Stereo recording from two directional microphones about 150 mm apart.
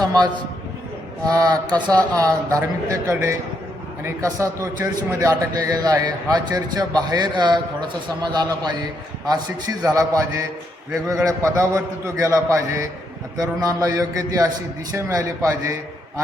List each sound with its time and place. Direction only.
0.0 s a man's voice: 25° right (ahead or behind)
1.9 s a man's voice: 25° right (ahead or behind)